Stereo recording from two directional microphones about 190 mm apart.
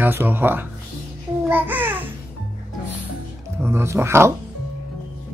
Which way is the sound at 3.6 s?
15° right (ahead or behind).